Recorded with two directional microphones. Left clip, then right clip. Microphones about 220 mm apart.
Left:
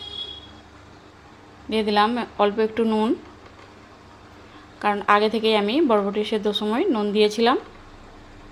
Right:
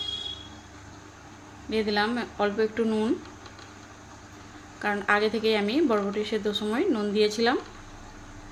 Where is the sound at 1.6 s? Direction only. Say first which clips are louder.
Left 6 dB; 20° left (ahead or behind).